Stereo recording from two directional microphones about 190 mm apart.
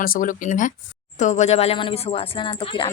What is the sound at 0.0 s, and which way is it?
Speech, 45° left (ahead or behind).